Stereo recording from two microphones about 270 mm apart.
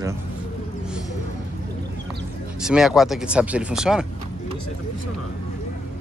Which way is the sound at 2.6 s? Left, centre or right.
Centre.